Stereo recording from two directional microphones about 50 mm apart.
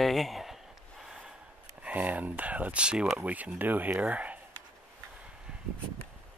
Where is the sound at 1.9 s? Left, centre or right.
Right; by 3.2 s centre.